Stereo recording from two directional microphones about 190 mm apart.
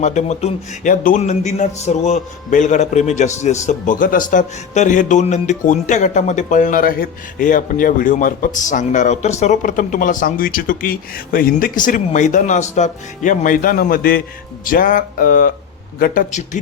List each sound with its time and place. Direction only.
0.0 s a man's voice: 40° left (ahead or behind); by 16.2 s 55° left (ahead or behind)